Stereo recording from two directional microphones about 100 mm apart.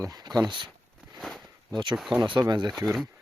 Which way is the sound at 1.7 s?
50° right (ahead or behind).